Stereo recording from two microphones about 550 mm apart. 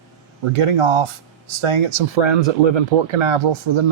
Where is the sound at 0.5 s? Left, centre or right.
Right.